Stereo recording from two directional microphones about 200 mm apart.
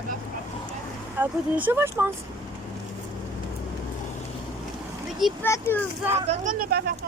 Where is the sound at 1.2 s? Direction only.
10° right (ahead or behind).